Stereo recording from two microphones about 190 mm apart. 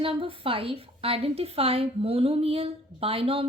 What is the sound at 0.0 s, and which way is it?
A woman's voice, 30° right (ahead or behind).